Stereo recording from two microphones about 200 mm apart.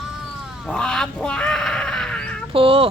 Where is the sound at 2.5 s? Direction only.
25° right (ahead or behind).